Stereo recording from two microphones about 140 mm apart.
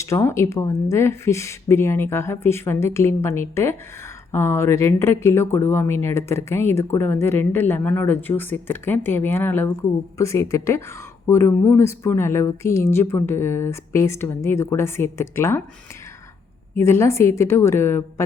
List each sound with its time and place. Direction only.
0.0 s speech: 20° left (ahead or behind)
16.7 s speech: 20° left (ahead or behind)